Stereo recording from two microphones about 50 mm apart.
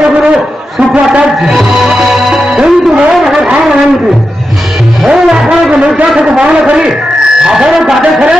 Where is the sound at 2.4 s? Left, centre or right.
Centre.